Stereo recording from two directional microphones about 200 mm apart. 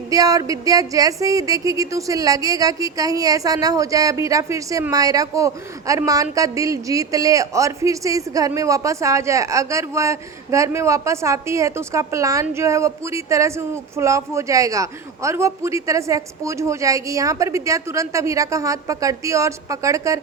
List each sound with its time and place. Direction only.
0.1 s a man's voice: 15° right (ahead or behind)